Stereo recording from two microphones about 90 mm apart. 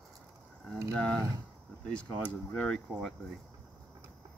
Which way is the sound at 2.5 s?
10° left (ahead or behind).